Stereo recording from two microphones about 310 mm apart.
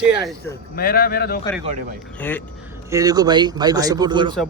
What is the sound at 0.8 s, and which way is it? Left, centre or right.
Speech, left.